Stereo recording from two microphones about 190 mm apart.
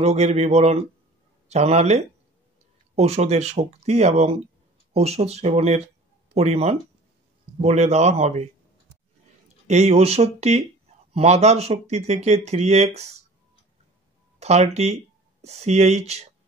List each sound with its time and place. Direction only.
0.0 s speech: 35° right (ahead or behind)
9.7 s speech: 35° right (ahead or behind)
14.4 s speech: 35° right (ahead or behind)